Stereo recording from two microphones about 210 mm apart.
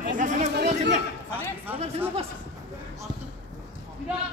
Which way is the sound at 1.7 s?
10° right (ahead or behind).